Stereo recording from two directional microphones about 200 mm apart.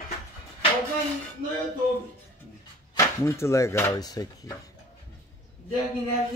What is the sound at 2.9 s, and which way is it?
Speech, 15° left (ahead or behind).